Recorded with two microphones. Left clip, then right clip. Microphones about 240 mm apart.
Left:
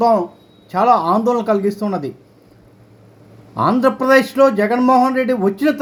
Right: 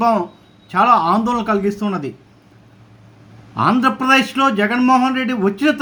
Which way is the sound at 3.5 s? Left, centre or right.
Centre.